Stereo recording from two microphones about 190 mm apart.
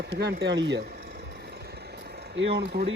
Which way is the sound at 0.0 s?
60° right (ahead or behind).